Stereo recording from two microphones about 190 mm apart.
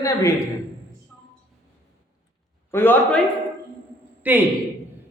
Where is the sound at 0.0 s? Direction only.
15° left (ahead or behind).